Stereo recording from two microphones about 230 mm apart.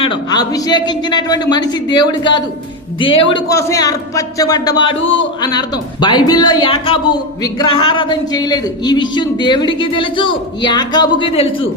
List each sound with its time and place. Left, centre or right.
0.0 s a man's voice: centre
4.9 s a man's voice: left
5.4 s speech: centre